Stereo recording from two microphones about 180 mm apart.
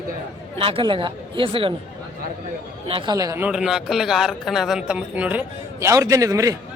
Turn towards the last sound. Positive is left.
turn(degrees=-20)  # may be behind; listen again after turning